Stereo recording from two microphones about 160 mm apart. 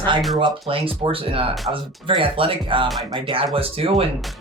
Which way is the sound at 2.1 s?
35° right (ahead or behind).